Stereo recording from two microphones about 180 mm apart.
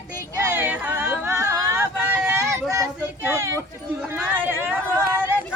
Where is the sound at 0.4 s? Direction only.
10° right (ahead or behind).